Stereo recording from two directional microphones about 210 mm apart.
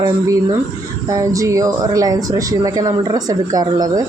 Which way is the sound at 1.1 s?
15° right (ahead or behind).